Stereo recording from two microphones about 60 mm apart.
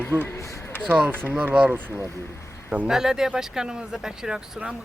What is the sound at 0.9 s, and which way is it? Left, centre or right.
Speech, right.